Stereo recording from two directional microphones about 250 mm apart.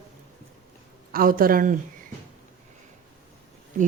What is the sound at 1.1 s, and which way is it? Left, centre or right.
Speech, right.